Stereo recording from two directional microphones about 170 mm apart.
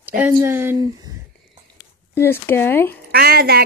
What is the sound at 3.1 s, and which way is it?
Speech, 65° right (ahead or behind).